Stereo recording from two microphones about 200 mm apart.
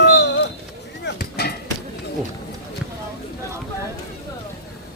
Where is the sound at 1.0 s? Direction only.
50° left (ahead or behind).